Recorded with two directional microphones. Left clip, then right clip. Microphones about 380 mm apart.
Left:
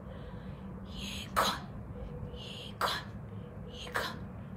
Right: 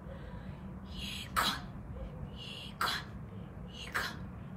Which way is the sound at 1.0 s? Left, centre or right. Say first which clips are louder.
Left 2 dB; centre.